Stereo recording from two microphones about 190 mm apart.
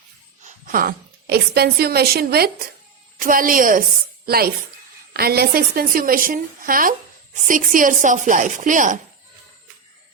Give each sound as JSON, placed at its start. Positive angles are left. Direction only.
{"t": 0.4, "sound": "a woman's voice", "side_deg": -45}